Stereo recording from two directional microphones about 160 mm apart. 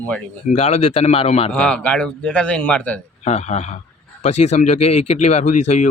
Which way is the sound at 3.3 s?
45° left (ahead or behind).